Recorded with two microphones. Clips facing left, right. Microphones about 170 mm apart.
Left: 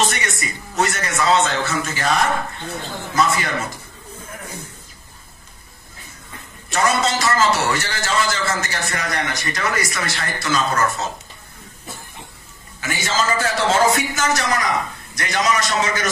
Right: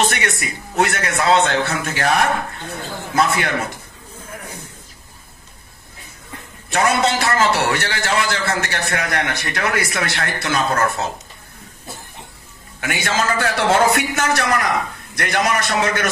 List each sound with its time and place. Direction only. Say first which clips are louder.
0.0 s a man's voice: right 2 dB; 60° right (ahead or behind)
6.7 s a man's voice: right 2 dB; 60° right (ahead or behind)
12.8 s a man's voice: right 1 dB; 60° right (ahead or behind)